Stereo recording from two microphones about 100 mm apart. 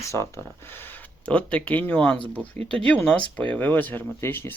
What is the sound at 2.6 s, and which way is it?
Speech, 80° right.